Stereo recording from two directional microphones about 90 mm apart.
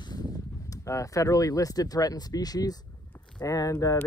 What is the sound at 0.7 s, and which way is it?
Speech, 35° left (ahead or behind).